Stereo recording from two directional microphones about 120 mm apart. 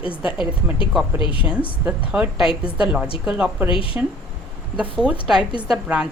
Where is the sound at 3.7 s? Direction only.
50° left (ahead or behind).